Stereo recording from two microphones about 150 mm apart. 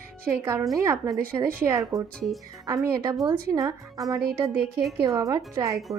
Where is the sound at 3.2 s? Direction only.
25° right (ahead or behind).